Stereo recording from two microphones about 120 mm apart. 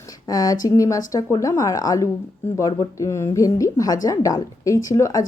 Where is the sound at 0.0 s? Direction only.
30° left (ahead or behind).